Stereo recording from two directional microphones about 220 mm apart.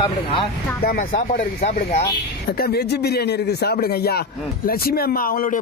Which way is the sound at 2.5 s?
45° left (ahead or behind).